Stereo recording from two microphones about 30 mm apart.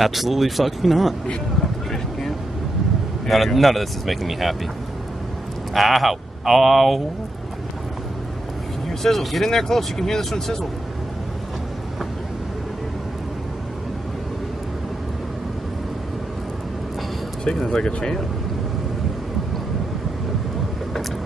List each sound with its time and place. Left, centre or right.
0.0 s speech: centre
3.3 s speech: centre
5.8 s speech: centre
8.8 s speech: centre
9.4 s speech: centre
17.6 s speech: left